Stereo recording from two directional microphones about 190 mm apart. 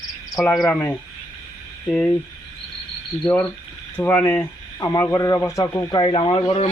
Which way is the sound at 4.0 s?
10° left (ahead or behind).